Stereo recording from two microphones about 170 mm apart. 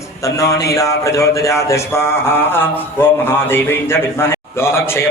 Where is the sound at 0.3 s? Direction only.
20° left (ahead or behind).